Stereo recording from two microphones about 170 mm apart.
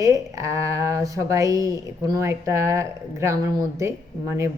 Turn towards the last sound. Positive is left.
turn(degrees=-20)  # may be behind; listen again after turning